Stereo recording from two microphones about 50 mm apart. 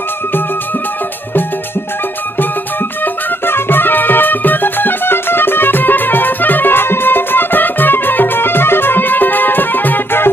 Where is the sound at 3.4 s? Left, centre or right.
Left.